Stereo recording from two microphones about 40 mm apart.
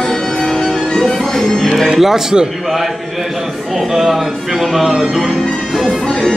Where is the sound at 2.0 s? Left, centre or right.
Centre.